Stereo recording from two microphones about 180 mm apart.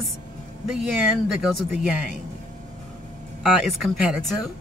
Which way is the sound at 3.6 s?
5° right (ahead or behind).